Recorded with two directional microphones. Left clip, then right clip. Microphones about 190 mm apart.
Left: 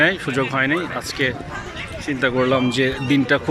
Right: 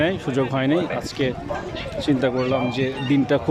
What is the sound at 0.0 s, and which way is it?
A man's voice, 10° right (ahead or behind).